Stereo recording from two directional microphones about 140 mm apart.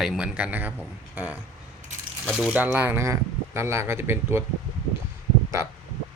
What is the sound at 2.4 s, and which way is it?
Speech, 10° right (ahead or behind).